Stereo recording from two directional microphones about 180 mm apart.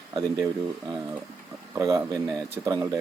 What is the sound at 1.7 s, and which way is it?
Speech, 15° right (ahead or behind).